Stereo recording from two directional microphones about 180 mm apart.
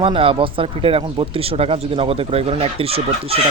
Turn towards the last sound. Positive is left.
turn(degrees=-30)  # may be behind; listen again after turning